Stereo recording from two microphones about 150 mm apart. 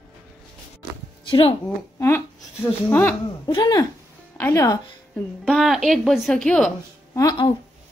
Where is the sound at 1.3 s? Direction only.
40° left (ahead or behind).